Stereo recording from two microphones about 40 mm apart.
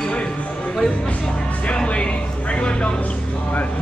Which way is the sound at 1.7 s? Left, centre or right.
Left.